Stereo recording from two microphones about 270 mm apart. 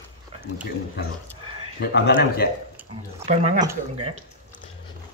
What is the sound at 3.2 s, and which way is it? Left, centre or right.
Speech, right.